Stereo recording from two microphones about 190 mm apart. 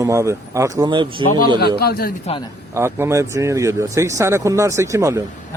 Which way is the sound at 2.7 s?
15° right (ahead or behind).